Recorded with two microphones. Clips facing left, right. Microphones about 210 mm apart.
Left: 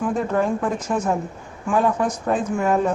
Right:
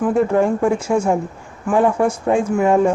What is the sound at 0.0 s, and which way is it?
Speech, 10° right (ahead or behind).